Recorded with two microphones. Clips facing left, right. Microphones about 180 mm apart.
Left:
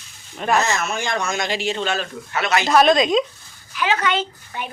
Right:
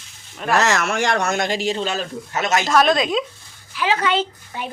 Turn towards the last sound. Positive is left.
turn(degrees=-30)  # may be behind; listen again after turning